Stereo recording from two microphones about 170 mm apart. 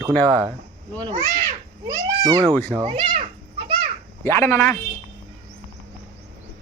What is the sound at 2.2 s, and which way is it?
Speech, 20° right (ahead or behind).